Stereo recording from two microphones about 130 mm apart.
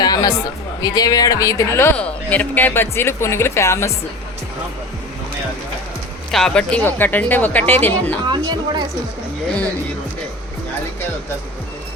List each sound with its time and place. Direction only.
0.0 s speech: 30° left (ahead or behind)
2.0 s speech: 10° left (ahead or behind)
6.3 s speech: 5° left (ahead or behind)
8.3 s speech: 35° right (ahead or behind)